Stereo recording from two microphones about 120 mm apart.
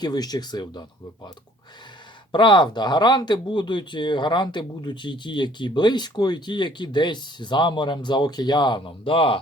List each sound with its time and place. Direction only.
0.0 s speech: 35° left (ahead or behind)
2.3 s speech: 40° left (ahead or behind)